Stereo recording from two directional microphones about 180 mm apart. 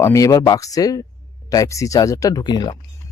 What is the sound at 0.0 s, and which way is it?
Speech, 20° left (ahead or behind).